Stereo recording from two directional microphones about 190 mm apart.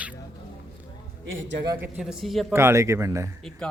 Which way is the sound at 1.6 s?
10° right (ahead or behind).